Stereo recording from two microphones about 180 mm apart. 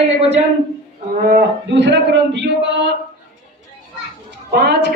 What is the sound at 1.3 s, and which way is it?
A man's voice, 70° right (ahead or behind).